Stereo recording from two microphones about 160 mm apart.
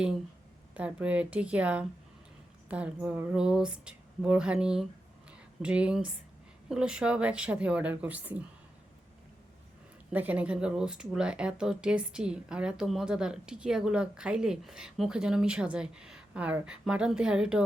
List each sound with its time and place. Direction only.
0.7 s speech: 10° right (ahead or behind)
10.1 s speech: 10° right (ahead or behind)